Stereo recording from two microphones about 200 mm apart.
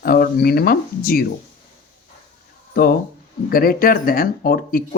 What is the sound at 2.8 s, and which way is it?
Speech, 50° left (ahead or behind).